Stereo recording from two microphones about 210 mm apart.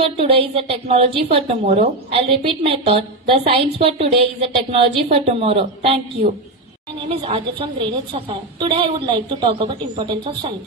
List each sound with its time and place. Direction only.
0.0 s a woman's voice: 25° right (ahead or behind)
7.1 s a woman's voice: 25° right (ahead or behind)